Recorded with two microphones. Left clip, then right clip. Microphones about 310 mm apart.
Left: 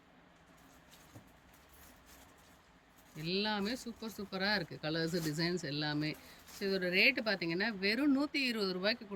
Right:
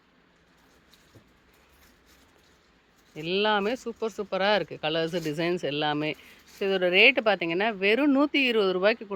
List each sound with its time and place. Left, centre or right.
3.2 s speech: centre